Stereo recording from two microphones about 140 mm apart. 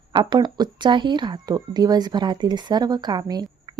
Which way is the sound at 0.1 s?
30° right (ahead or behind).